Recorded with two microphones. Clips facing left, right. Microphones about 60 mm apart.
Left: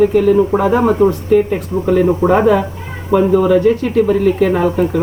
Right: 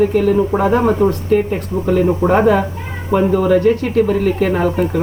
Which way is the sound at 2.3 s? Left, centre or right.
Centre.